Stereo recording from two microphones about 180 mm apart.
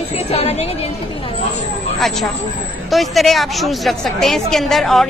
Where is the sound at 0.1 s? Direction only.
35° left (ahead or behind).